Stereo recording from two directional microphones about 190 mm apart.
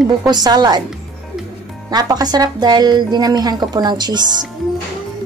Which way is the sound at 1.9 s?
20° right (ahead or behind).